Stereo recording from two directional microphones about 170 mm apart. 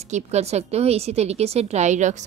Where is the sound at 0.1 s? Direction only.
40° right (ahead or behind).